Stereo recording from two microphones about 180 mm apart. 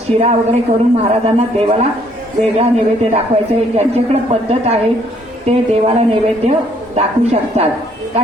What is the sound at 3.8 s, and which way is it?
A woman's voice, 35° right (ahead or behind).